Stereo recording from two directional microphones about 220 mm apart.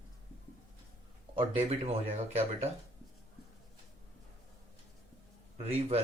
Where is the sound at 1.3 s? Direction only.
30° right (ahead or behind).